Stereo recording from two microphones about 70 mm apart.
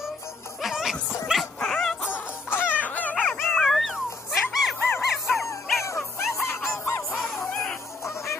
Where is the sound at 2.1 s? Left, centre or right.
Left.